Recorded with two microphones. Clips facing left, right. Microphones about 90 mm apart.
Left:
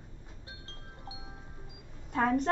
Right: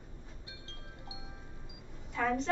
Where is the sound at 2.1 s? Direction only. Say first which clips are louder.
Left 4 dB; 50° left (ahead or behind).